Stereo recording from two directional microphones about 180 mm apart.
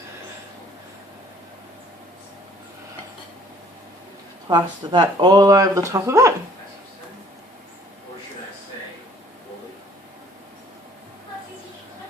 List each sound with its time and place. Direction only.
4.4 s speech: 20° right (ahead or behind)